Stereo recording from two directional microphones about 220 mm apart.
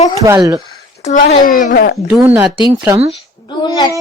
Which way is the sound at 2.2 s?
5° right (ahead or behind).